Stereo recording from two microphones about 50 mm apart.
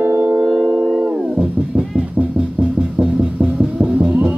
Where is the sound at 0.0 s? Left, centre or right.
Right.